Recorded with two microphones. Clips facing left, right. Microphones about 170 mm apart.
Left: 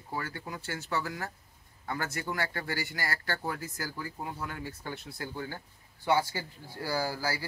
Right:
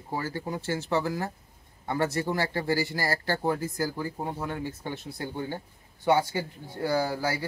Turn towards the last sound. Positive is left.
turn(degrees=-25)  # may be behind; listen again after turning